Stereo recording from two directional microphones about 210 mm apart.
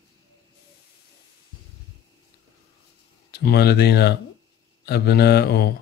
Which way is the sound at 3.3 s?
50° left (ahead or behind).